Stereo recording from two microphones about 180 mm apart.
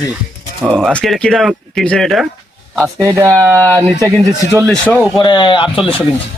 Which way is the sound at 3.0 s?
15° right (ahead or behind).